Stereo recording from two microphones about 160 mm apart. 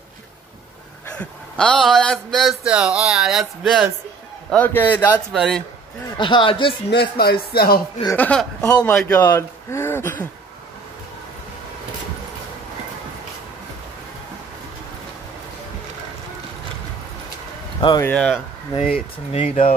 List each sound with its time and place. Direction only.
1.1 s speech: 5° left (ahead or behind)
4.5 s speech: 10° left (ahead or behind)
5.3 s speech: centre (ahead or behind)
6.1 s a man's voice: 30° left (ahead or behind)
6.9 s speech: 85° left
8.2 s speech: 5° left (ahead or behind)
17.7 s speech: 25° left (ahead or behind)
18.0 s speech: 5° left (ahead or behind)
19.3 s a man's voice: 40° left (ahead or behind)